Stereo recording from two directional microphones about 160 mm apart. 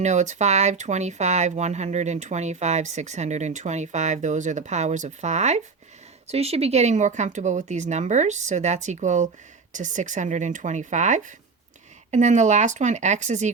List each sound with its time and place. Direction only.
0.0 s speech: 45° right (ahead or behind)